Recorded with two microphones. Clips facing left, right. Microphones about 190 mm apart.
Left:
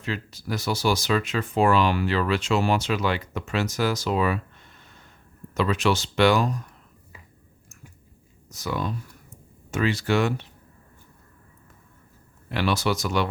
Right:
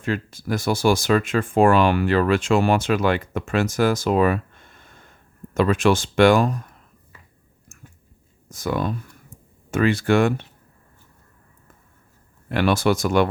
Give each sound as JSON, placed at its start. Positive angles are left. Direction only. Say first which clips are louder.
{"t": 0.0, "sound": "speech", "louder": "right 6 dB", "side_deg": -50}
{"t": 8.4, "sound": "speech", "louder": "right 5 dB", "side_deg": -50}
{"t": 12.5, "sound": "speech", "louder": "right 5 dB", "side_deg": -50}